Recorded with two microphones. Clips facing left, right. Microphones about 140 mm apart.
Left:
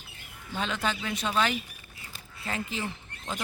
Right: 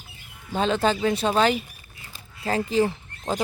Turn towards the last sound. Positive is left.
turn(degrees=-35)  # may be behind; listen again after turning